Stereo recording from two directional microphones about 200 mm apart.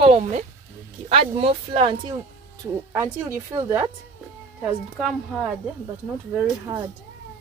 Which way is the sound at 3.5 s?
15° right (ahead or behind).